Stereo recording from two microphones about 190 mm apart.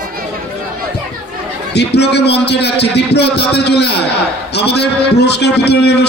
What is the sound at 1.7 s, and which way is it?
A man's voice, 60° left (ahead or behind).